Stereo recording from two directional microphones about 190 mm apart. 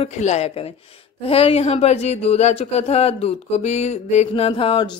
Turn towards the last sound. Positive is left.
turn(degrees=25)  # may be behind; listen again after turning